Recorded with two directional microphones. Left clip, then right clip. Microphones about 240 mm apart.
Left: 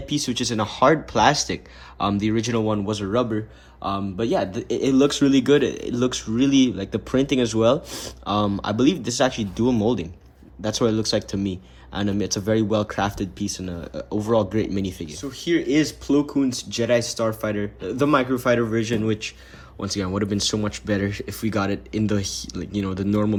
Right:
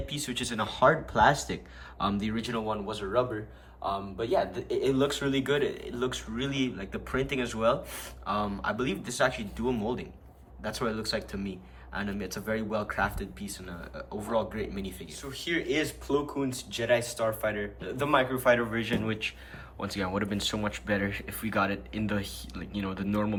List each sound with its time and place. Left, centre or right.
0.1 s speech: centre
4.3 s speech: left